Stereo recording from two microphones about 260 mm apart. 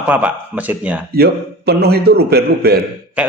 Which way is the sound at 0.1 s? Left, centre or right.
Centre.